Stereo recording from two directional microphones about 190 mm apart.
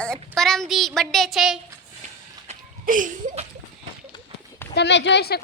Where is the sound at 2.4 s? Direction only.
45° right (ahead or behind).